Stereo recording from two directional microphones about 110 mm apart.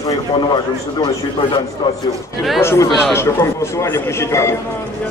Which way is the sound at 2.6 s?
25° left (ahead or behind).